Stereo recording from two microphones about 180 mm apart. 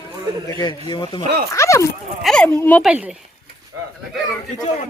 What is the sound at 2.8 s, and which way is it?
Speech, 10° right (ahead or behind).